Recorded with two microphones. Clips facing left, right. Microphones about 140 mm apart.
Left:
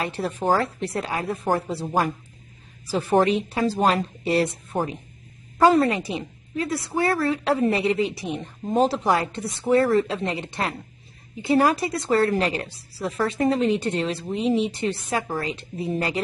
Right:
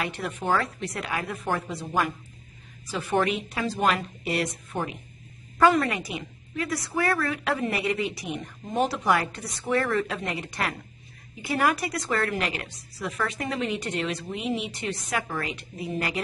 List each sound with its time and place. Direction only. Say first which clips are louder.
0.0 s a woman's voice: left 5 dB; 35° left (ahead or behind)